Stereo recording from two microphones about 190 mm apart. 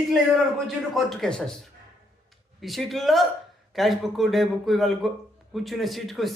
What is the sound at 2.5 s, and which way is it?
Speech, centre (ahead or behind).